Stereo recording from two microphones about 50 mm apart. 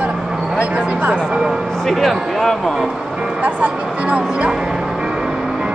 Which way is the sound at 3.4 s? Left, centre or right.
Right.